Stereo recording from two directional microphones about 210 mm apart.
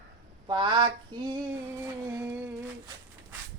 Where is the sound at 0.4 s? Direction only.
20° right (ahead or behind).